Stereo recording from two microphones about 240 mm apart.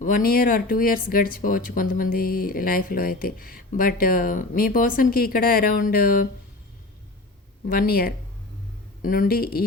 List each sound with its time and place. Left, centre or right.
0.0 s speech: left
7.7 s speech: left